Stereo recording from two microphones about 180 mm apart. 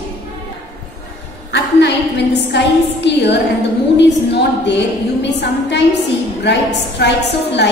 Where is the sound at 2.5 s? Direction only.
75° left (ahead or behind).